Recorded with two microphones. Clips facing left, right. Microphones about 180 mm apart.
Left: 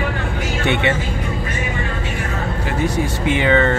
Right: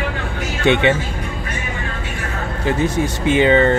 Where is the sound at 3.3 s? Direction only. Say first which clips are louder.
Right 3 dB; 20° right (ahead or behind).